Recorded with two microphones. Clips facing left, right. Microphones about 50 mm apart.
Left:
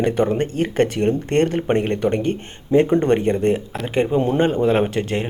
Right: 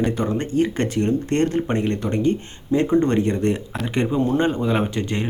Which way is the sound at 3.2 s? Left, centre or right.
Centre.